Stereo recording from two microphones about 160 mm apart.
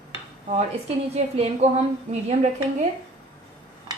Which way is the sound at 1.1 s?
40° right (ahead or behind).